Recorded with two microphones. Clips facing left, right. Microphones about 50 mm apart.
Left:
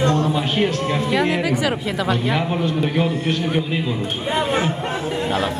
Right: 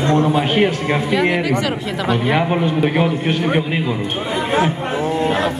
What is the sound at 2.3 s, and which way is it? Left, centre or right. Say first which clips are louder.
A man's voice: right 4 dB; right.